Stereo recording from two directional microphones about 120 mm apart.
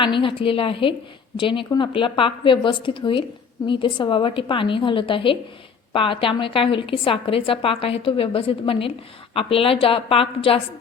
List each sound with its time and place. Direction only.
0.0 s a woman's voice: 45° left (ahead or behind)